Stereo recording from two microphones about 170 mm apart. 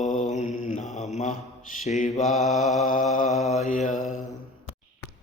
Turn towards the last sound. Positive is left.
turn(degrees=50)  # may be behind; listen again after turning